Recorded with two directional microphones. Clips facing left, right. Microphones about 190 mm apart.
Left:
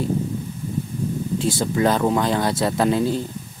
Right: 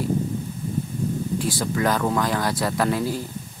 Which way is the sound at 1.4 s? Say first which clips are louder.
Left 5 dB; 25° left (ahead or behind).